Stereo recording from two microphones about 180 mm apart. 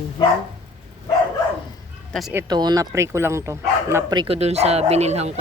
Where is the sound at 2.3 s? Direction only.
25° right (ahead or behind).